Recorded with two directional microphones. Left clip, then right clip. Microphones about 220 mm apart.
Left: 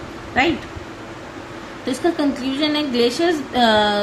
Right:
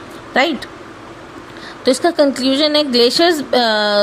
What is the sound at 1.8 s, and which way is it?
A woman's voice, 50° right (ahead or behind).